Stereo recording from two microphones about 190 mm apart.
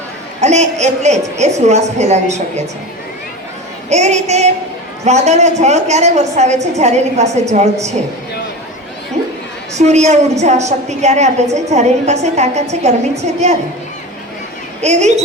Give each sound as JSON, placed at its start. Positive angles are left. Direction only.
{"t": 0.4, "sound": "a woman's voice", "side_deg": -35}
{"t": 3.8, "sound": "a woman's voice", "side_deg": -35}
{"t": 9.7, "sound": "a woman's voice", "side_deg": -35}
{"t": 14.8, "sound": "a woman's voice", "side_deg": -35}